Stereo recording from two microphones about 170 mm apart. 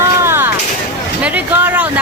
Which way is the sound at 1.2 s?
10° right (ahead or behind).